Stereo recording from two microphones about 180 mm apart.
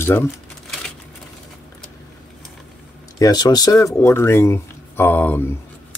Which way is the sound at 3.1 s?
20° left (ahead or behind).